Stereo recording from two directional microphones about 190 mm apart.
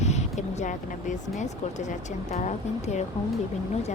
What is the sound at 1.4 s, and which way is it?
Speech, 40° left (ahead or behind).